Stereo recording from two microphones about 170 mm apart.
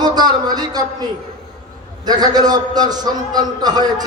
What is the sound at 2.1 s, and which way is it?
A man's voice, 25° right (ahead or behind).